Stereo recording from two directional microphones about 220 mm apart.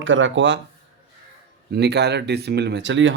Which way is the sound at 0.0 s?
60° right (ahead or behind).